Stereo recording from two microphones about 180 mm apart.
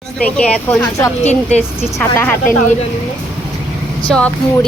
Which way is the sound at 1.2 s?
40° left (ahead or behind).